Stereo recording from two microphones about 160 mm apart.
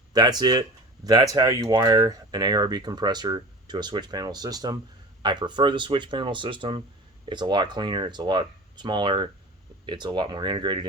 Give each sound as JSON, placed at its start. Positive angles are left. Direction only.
{"t": 0.1, "sound": "speech", "side_deg": -25}